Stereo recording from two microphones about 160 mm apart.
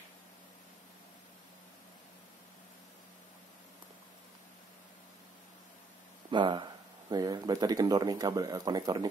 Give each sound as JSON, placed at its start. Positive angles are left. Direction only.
{"t": 6.3, "sound": "speech", "side_deg": -30}